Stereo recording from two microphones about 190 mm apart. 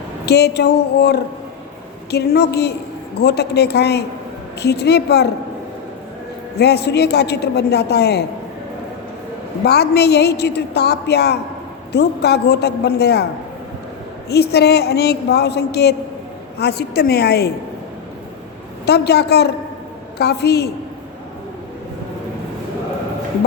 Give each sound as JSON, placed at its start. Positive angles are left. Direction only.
{"t": 0.3, "sound": "a man's voice", "side_deg": 60}
{"t": 6.6, "sound": "a man's voice", "side_deg": 60}
{"t": 9.6, "sound": "a man's voice", "side_deg": 60}
{"t": 14.3, "sound": "a man's voice", "side_deg": 60}
{"t": 18.9, "sound": "a man's voice", "side_deg": 60}